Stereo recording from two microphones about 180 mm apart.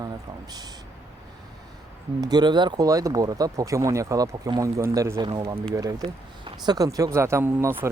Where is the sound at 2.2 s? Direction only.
25° right (ahead or behind).